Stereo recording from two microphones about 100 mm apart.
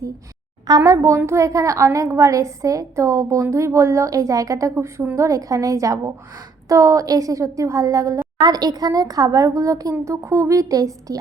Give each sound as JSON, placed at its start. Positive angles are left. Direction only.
{"t": 0.9, "sound": "a woman's voice", "side_deg": -30}